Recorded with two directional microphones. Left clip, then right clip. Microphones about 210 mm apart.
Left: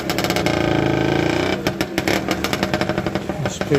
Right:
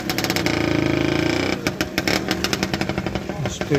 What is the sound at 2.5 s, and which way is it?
Jackhammer, 10° right (ahead or behind).